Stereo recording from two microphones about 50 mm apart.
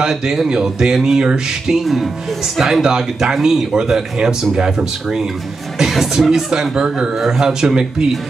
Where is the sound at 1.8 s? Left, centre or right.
Centre.